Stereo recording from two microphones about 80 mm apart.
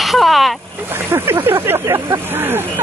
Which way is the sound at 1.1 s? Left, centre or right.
Right.